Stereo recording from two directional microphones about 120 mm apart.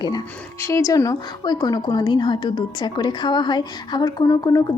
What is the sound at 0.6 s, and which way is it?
A woman's voice, 25° left (ahead or behind).